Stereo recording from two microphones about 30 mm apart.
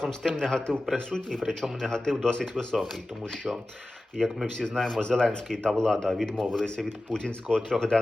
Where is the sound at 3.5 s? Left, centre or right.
Right.